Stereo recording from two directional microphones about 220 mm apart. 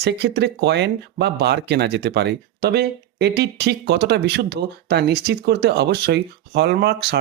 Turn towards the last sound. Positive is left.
turn(degrees=-50)  # may be behind; listen again after turning